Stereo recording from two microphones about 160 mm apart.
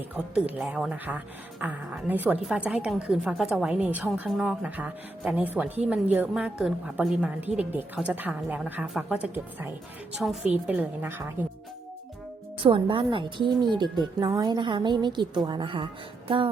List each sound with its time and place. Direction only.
0.3 s a woman's voice: 5° right (ahead or behind)
12.6 s a woman's voice: 30° right (ahead or behind)